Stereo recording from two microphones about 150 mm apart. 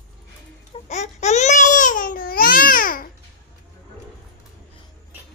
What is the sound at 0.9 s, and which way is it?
Babbling, 50° left (ahead or behind).